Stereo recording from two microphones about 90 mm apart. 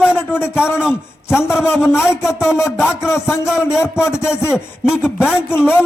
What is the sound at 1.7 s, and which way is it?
Speech, 30° left (ahead or behind).